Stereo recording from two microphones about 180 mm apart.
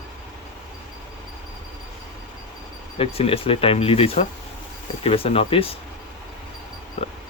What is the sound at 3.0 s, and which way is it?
Speech, 30° left (ahead or behind).